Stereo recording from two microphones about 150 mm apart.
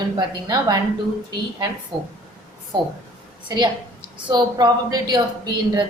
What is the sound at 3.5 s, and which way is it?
A woman's voice, 30° right (ahead or behind).